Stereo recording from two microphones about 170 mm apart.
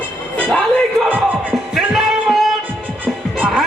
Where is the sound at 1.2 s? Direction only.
Centre (ahead or behind).